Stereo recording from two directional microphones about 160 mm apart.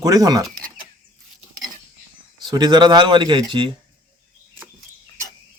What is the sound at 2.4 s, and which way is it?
Speech, 25° right (ahead or behind).